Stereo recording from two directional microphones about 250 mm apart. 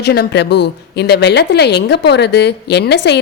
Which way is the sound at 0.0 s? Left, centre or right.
Left.